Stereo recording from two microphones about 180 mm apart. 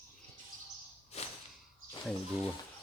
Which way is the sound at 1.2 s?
35° left (ahead or behind).